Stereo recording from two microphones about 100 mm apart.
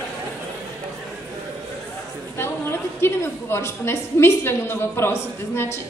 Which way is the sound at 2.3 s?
25° left (ahead or behind).